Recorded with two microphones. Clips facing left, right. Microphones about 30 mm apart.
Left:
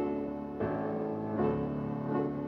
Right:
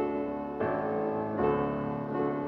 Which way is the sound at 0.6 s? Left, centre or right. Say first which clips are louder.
Right 3 dB; right.